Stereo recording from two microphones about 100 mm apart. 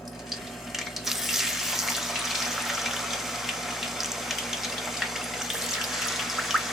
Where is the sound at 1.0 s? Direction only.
5° right (ahead or behind).